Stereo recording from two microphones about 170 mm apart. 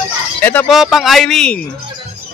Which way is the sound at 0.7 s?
Centre (ahead or behind).